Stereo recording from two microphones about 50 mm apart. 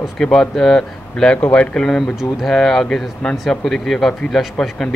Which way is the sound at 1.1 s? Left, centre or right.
Left.